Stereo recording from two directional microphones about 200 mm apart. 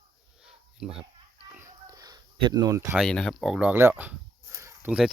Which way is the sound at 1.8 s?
20° right (ahead or behind).